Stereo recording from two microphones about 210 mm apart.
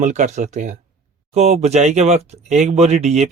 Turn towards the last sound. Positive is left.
turn(degrees=-30)  # may be behind; listen again after turning